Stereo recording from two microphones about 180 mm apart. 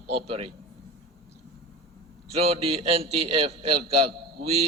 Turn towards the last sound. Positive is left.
turn(degrees=-35)  # may be behind; listen again after turning